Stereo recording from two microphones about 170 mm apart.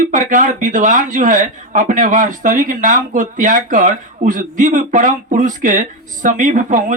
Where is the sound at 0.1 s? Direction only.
50° right (ahead or behind).